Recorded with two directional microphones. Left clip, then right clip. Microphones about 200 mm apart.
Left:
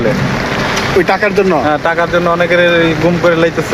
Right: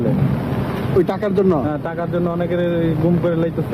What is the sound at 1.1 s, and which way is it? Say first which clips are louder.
Speech: left 7 dB; centre (ahead or behind).